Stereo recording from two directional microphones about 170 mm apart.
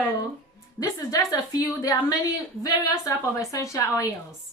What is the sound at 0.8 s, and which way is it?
A woman's voice, 20° left (ahead or behind).